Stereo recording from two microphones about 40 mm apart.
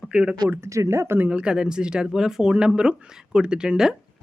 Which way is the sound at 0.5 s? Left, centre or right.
Right.